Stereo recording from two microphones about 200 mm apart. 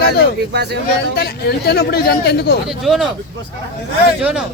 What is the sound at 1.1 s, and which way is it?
Speech, 55° left (ahead or behind).